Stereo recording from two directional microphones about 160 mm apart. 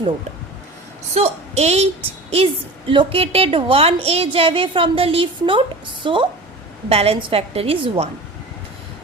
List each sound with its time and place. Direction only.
1.1 s a woman's voice: 40° right (ahead or behind)